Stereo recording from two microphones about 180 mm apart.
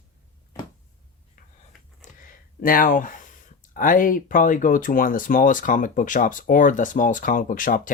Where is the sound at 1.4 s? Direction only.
50° left (ahead or behind).